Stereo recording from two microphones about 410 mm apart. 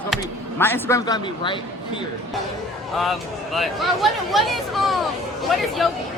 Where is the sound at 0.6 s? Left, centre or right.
Centre.